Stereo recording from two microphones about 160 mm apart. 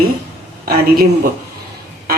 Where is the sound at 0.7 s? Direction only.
70° right (ahead or behind).